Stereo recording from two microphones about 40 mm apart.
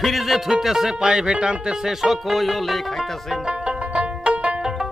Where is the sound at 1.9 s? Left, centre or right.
Centre.